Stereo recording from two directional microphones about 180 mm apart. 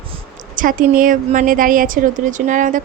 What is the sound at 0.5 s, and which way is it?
A woman's voice, 50° right (ahead or behind).